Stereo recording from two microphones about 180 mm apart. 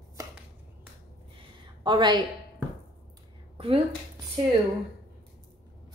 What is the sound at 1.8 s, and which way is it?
Speech, 25° right (ahead or behind).